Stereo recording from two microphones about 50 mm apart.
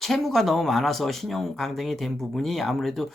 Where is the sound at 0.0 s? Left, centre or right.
Centre.